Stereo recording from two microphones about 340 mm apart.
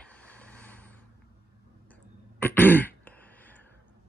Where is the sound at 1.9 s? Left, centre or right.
Centre.